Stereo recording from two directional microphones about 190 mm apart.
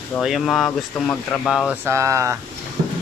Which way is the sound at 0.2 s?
Centre (ahead or behind).